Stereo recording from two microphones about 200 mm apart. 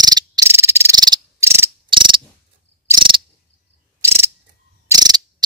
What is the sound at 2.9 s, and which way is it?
Cricket, 25° right (ahead or behind).